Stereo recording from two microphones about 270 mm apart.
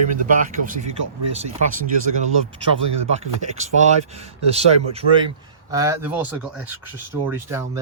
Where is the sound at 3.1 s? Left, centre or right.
Right; by 6.1 s centre.